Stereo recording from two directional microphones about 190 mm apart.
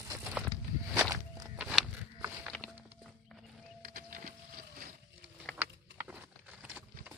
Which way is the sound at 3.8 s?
45° right (ahead or behind).